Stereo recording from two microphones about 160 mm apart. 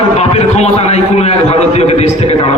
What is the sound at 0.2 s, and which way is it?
A man's voice, 40° left (ahead or behind).